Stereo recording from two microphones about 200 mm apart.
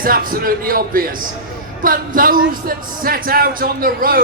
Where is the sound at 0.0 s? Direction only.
45° right (ahead or behind).